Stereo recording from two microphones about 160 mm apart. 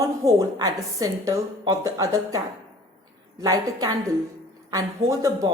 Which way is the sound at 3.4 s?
25° right (ahead or behind).